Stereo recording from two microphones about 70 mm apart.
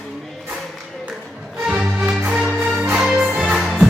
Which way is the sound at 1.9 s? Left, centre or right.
Centre.